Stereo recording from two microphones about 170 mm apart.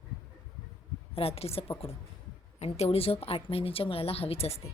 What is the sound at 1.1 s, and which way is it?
A woman's voice, 35° left (ahead or behind).